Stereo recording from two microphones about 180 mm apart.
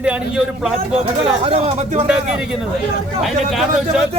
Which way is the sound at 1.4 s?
35° right (ahead or behind).